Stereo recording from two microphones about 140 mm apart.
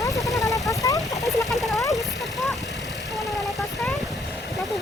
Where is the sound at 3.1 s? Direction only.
Centre (ahead or behind).